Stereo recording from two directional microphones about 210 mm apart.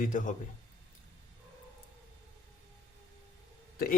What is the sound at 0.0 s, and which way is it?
Speech, 40° left (ahead or behind).